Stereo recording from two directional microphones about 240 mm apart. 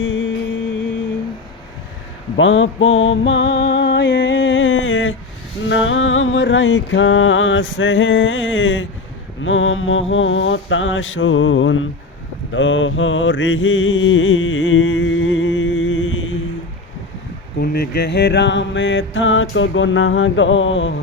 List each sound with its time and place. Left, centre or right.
0.0 s music: left
2.3 s music: left
5.6 s mantra: left
17.6 s mantra: left